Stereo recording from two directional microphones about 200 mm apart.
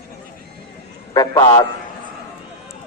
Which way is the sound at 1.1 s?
20° left (ahead or behind).